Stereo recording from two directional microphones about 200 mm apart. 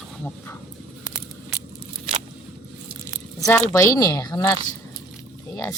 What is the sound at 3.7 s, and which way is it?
Speech, 15° left (ahead or behind).